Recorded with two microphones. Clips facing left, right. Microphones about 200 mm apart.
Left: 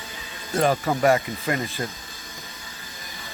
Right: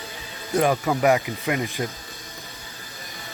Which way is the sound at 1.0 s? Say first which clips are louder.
Even; 10° right (ahead or behind).